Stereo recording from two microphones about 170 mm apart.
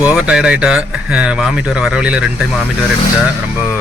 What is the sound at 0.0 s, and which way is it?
Speech, 5° right (ahead or behind).